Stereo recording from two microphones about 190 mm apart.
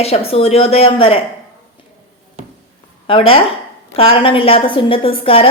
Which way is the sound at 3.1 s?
30° left (ahead or behind).